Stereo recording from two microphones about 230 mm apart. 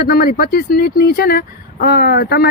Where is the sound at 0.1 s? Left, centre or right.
Left.